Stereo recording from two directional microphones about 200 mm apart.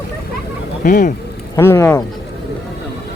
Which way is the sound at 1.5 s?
15° left (ahead or behind).